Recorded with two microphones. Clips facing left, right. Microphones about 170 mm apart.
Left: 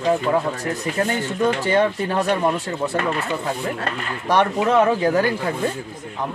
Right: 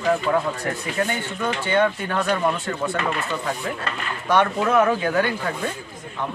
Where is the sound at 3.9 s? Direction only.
55° left (ahead or behind).